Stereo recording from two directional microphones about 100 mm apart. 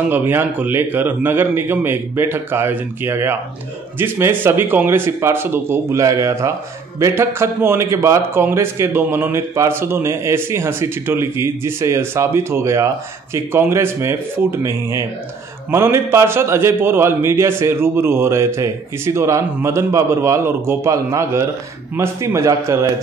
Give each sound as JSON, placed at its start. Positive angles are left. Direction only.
{"t": 0.1, "sound": "a man's voice", "side_deg": -20}